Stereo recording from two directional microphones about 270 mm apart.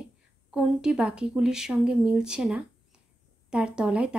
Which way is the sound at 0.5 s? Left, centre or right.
Centre.